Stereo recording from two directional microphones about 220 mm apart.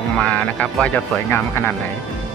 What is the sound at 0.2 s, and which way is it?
Speech, 5° left (ahead or behind).